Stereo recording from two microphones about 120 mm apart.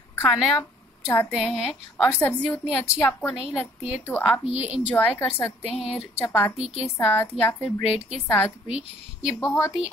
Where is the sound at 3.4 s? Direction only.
5° right (ahead or behind).